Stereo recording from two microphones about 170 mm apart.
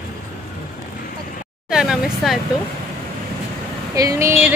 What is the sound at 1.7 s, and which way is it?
Vehicle, 5° right (ahead or behind).